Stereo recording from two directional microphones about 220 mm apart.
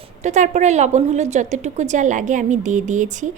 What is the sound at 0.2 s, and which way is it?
A woman's voice, 30° right (ahead or behind).